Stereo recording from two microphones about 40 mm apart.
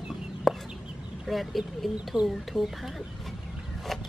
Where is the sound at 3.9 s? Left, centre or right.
Centre.